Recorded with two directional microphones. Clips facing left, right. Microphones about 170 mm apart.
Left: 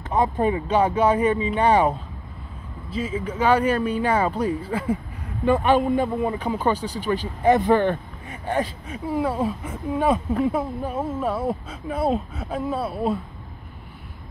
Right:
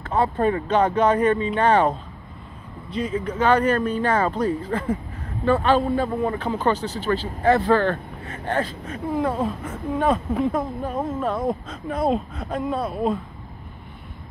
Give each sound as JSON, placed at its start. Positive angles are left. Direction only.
{"t": 0.0, "sound": "speech", "side_deg": 15}